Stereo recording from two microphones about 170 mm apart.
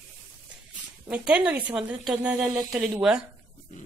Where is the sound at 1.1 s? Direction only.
5° right (ahead or behind).